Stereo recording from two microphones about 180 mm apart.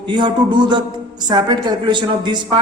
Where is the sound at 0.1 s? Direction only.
25° right (ahead or behind).